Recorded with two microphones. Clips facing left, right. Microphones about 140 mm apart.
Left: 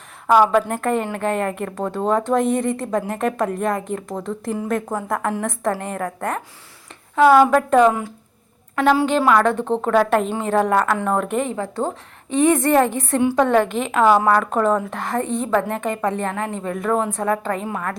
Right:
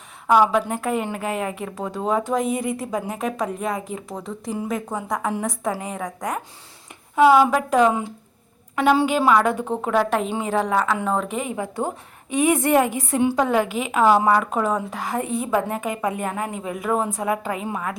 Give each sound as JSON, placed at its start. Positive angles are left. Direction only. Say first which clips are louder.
{"t": 0.3, "sound": "speech", "louder": "left 2 dB", "side_deg": 0}
{"t": 7.2, "sound": "a woman's voice", "louder": "left 2 dB", "side_deg": -10}
{"t": 13.3, "sound": "a woman's voice", "louder": "left 4 dB", "side_deg": -5}